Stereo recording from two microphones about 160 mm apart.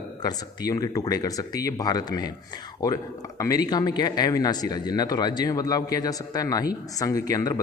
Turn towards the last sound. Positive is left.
turn(degrees=20)  # may be behind; listen again after turning